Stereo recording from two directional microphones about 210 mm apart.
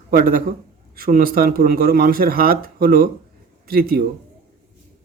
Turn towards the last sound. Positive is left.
turn(degrees=-45)  # may be behind; listen again after turning